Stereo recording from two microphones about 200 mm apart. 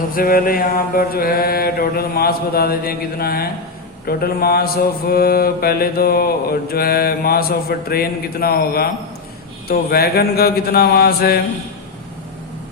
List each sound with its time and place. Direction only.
0.1 s mantra: 45° left (ahead or behind)